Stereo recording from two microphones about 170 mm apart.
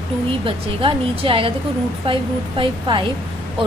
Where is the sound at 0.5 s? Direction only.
30° right (ahead or behind).